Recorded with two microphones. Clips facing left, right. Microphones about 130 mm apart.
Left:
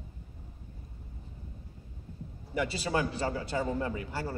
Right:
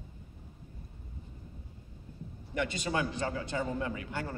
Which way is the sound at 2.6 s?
35° left (ahead or behind).